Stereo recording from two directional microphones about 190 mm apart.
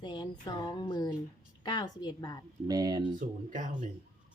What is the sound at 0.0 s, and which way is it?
A woman's voice, 25° left (ahead or behind).